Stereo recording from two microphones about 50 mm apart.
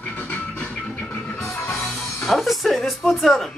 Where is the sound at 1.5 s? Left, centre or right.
Left.